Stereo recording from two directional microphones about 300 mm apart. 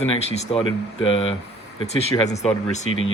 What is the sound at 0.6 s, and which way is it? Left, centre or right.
Speech, left.